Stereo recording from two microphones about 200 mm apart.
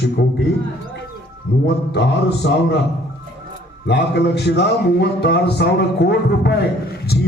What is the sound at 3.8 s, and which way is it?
A man's voice, 55° left (ahead or behind).